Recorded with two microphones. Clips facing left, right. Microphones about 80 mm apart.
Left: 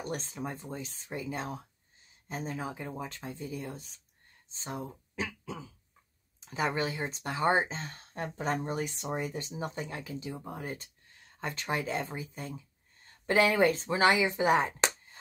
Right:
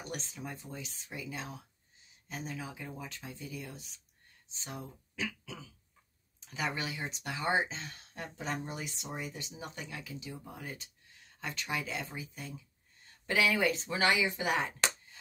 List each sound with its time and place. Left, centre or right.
0.0 s speech: left
13.9 s speech: left